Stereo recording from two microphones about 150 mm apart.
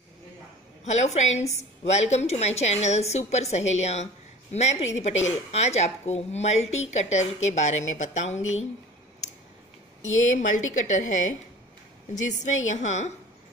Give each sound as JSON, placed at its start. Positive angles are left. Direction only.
{"t": 0.8, "sound": "a woman's voice", "side_deg": 50}
{"t": 10.3, "sound": "a woman's voice", "side_deg": 55}